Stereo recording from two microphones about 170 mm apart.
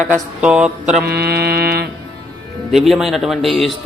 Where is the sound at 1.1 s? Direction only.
70° right (ahead or behind).